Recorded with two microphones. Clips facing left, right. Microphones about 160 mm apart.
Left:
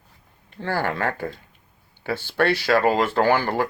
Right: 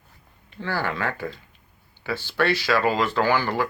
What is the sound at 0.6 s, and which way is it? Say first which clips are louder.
Speech: left 2 dB; 50° left (ahead or behind).